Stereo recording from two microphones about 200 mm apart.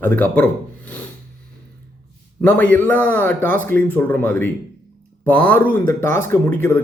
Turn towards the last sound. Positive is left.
turn(degrees=10)  # may be behind; listen again after turning